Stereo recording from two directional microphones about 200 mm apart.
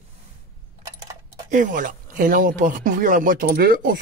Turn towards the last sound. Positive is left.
turn(degrees=-45)  # may be behind; listen again after turning